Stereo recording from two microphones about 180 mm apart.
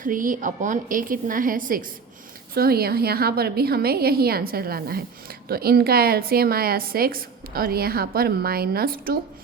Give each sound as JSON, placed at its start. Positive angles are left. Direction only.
{"t": 0.0, "sound": "a woman's voice", "side_deg": -50}